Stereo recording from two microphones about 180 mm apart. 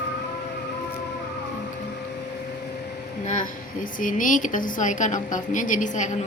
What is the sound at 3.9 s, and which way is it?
A woman's voice, 45° left (ahead or behind).